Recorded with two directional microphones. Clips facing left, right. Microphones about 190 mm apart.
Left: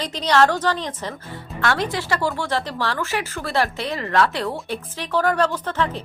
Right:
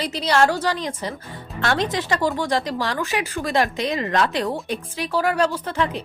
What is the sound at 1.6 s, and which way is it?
Speech, 20° right (ahead or behind).